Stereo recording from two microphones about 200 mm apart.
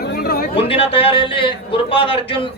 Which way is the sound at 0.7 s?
30° left (ahead or behind).